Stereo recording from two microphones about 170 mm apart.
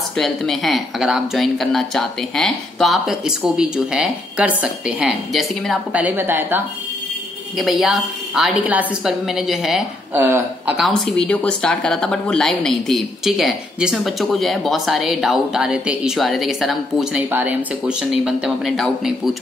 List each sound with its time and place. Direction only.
0.1 s speech: centre (ahead or behind)
7.5 s speech: centre (ahead or behind)
10.2 s speech: 15° right (ahead or behind)
10.8 s speech: centre (ahead or behind)